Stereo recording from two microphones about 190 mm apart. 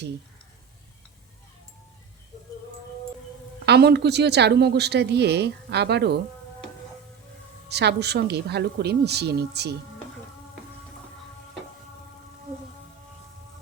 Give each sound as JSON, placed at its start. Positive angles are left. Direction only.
{"t": 3.7, "sound": "speech", "side_deg": -60}
{"t": 7.7, "sound": "speech", "side_deg": -60}